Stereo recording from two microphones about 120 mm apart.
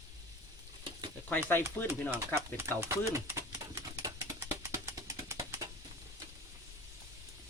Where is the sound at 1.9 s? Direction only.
20° right (ahead or behind).